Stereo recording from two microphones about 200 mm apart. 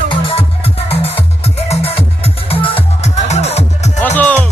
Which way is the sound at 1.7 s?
30° left (ahead or behind).